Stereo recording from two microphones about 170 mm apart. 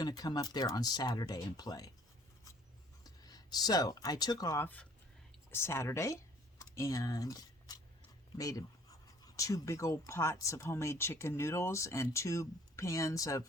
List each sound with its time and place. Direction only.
0.0 s speech: 20° left (ahead or behind)
3.0 s speech: 25° left (ahead or behind)